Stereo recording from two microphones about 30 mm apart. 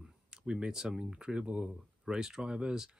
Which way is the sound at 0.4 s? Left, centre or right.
Right.